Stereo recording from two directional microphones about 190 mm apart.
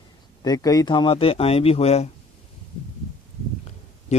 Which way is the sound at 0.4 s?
20° left (ahead or behind).